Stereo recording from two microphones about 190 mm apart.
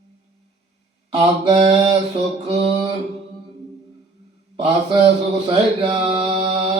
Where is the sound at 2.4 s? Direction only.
30° right (ahead or behind).